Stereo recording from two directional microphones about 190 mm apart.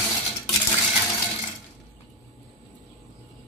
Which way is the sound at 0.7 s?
15° left (ahead or behind).